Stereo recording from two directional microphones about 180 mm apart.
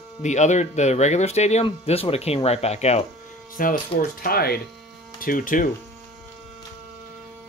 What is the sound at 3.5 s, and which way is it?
Speech, 50° left (ahead or behind).